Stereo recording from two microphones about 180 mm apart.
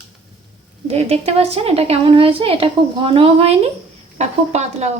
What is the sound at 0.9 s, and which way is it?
A woman's voice, 35° right (ahead or behind).